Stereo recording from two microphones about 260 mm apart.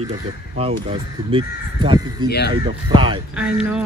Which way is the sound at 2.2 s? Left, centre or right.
Left.